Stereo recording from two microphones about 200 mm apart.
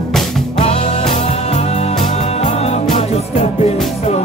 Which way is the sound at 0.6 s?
35° left (ahead or behind).